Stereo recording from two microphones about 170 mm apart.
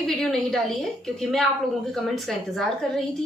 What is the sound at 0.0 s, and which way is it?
A woman's voice, centre (ahead or behind).